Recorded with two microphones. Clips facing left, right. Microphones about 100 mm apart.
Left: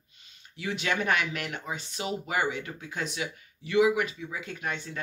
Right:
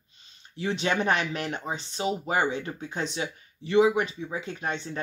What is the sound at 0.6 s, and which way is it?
Speech, 30° right (ahead or behind).